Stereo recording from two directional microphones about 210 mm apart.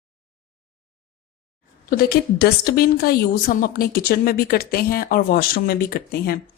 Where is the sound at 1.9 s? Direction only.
45° left (ahead or behind).